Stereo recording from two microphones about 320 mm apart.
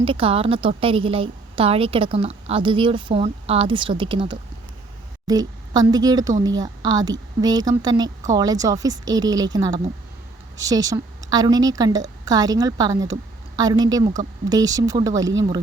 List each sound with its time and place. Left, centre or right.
0.0 s a woman's voice: centre